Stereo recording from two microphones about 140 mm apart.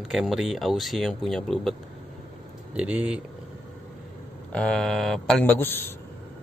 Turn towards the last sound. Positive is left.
turn(degrees=15)  # may be behind; listen again after turning